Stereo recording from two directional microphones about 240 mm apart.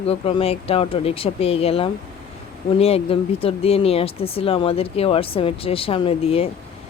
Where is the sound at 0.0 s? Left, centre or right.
Left.